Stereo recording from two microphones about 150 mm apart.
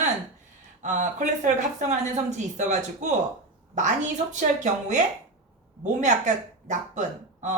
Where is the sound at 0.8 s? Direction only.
55° right (ahead or behind).